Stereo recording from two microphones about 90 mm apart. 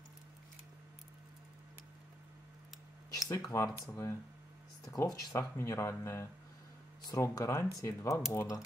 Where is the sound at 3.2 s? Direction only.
40° left (ahead or behind).